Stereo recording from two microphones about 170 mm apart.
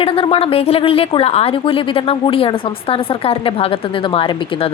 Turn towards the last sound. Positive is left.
turn(degrees=35)  # may be behind; listen again after turning